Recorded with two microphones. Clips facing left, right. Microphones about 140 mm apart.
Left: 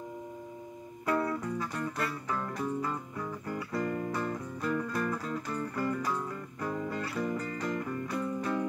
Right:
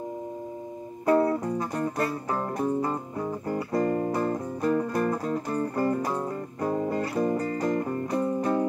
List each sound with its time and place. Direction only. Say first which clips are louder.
1.0 s music: right 8 dB; 35° right (ahead or behind)